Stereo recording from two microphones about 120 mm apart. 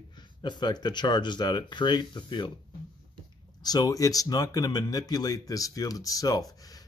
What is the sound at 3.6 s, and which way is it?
Speech, 30° left (ahead or behind).